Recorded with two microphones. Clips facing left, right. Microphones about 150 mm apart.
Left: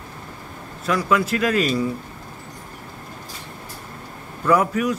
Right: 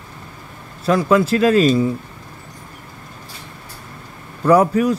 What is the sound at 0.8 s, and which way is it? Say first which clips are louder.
Speech: right 5 dB; 30° right (ahead or behind).